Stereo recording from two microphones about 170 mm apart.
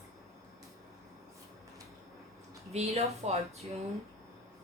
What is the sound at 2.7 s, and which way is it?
Speech, 40° right (ahead or behind).